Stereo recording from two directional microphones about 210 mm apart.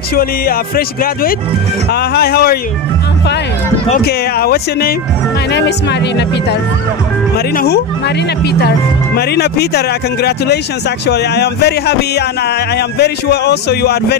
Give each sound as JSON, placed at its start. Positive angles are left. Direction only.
{"t": 0.1, "sound": "speech", "side_deg": 45}
{"t": 4.0, "sound": "speech", "side_deg": 50}